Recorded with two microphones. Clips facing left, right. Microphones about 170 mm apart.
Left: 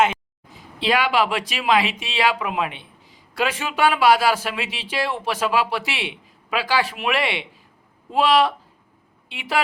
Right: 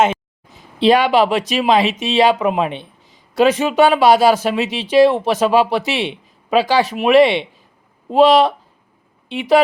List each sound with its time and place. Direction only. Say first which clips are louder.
0.5 s a man's voice: right 9 dB; 25° right (ahead or behind)